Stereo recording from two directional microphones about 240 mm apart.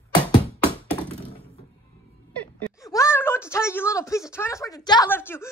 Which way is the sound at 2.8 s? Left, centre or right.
Centre.